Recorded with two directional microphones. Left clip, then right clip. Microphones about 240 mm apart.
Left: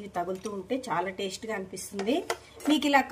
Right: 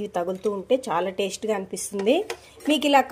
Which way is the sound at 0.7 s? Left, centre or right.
Right.